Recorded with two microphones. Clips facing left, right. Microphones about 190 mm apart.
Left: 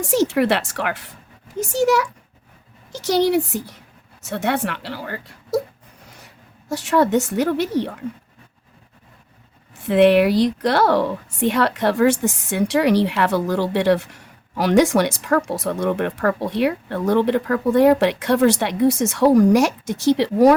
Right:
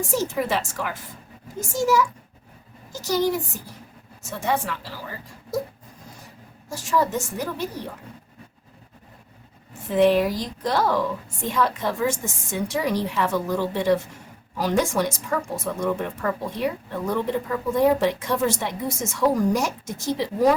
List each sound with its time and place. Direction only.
0.0 s a woman's voice: 70° left (ahead or behind)
3.1 s a woman's voice: 70° left (ahead or behind)
9.8 s a woman's voice: 70° left (ahead or behind)